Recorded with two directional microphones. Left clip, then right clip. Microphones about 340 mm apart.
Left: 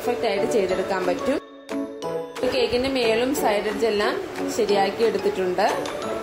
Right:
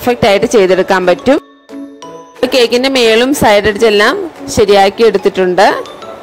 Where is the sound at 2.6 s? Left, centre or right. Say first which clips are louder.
Right 14 dB; right.